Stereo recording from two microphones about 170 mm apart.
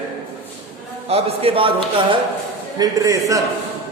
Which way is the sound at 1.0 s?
35° right (ahead or behind).